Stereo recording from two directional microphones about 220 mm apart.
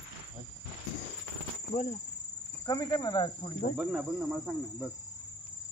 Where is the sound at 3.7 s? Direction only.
5° right (ahead or behind).